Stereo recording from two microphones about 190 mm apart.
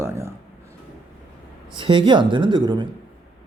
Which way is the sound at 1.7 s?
25° right (ahead or behind).